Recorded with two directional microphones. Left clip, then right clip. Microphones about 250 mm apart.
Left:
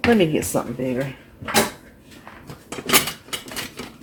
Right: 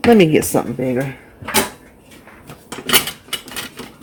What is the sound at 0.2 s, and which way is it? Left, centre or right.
Speech, right.